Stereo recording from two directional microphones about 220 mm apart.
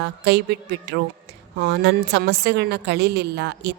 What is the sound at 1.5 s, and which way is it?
A woman's voice, 50° right (ahead or behind).